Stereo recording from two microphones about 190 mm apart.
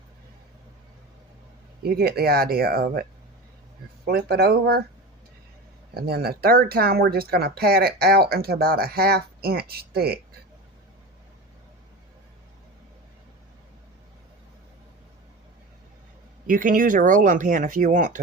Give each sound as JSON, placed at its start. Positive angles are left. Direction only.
{"t": 1.8, "sound": "speech", "side_deg": -55}
{"t": 5.9, "sound": "speech", "side_deg": -55}
{"t": 16.5, "sound": "speech", "side_deg": -45}